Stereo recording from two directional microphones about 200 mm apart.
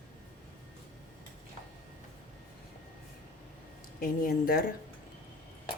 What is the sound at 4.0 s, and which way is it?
Speech, 45° left (ahead or behind).